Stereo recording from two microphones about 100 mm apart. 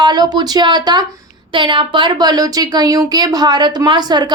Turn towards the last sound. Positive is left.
turn(degrees=-45)  # may be behind; listen again after turning